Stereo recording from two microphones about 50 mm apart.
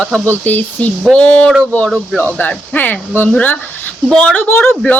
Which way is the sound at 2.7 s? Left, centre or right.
Left.